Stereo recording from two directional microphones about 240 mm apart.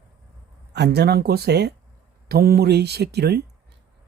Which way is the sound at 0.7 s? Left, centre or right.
Right.